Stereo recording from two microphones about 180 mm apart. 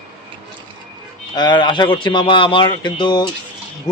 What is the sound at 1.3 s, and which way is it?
Speech, 25° left (ahead or behind).